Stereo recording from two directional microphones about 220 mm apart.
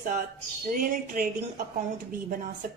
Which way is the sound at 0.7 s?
40° right (ahead or behind).